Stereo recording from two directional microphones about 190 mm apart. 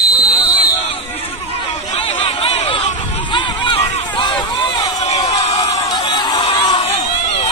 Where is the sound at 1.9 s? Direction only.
30° left (ahead or behind).